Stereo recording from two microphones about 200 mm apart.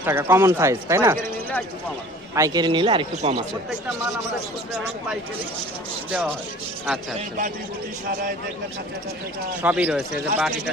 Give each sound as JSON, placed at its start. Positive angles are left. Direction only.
{"t": 0.0, "sound": "speech", "side_deg": -10}
{"t": 2.3, "sound": "a man's voice", "side_deg": -20}
{"t": 6.1, "sound": "speech", "side_deg": -5}
{"t": 9.6, "sound": "speech", "side_deg": -5}